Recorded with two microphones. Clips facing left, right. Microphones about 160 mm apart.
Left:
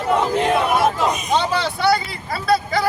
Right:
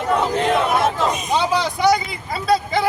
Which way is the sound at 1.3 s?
10° right (ahead or behind).